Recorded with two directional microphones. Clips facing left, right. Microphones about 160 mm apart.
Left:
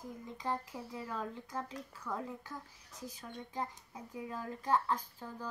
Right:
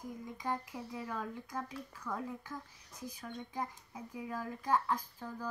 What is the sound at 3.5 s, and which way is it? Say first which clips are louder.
Speech: left 3 dB; 15° right (ahead or behind).